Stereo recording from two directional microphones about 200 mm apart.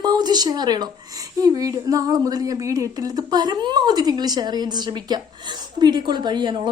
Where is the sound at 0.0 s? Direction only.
20° right (ahead or behind).